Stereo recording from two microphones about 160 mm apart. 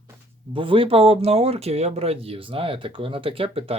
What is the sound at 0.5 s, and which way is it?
Speech, 35° right (ahead or behind).